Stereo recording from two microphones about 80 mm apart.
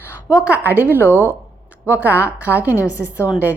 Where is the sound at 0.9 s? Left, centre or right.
Left.